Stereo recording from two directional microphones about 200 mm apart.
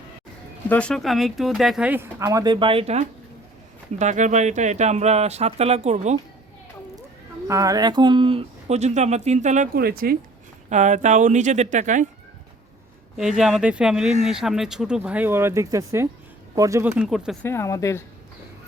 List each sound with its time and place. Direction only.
0.7 s speech: 5° left (ahead or behind); by 6.1 s 35° right (ahead or behind)
7.4 s speech: 15° right (ahead or behind); by 9.8 s 35° right (ahead or behind)
9.8 s speech: 50° right (ahead or behind)
10.7 s speech: 35° right (ahead or behind)
13.1 s speech: 5° right (ahead or behind)
17.4 s speech: 15° left (ahead or behind)